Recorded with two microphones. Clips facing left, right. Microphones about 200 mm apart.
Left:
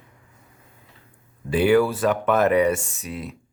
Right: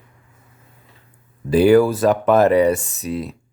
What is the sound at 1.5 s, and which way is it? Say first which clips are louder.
Speech: right 5 dB; 40° right (ahead or behind).